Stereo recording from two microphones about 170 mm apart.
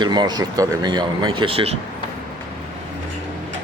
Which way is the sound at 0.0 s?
25° right (ahead or behind).